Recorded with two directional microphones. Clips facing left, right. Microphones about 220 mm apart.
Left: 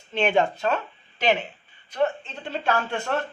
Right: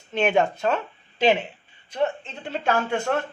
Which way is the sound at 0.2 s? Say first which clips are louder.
Right 1 dB; 5° right (ahead or behind).